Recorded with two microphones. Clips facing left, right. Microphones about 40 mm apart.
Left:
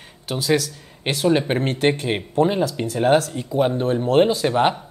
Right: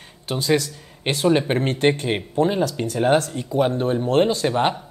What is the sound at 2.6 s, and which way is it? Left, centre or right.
Speech, centre.